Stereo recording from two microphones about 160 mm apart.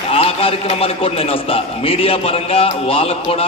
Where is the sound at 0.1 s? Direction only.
35° left (ahead or behind).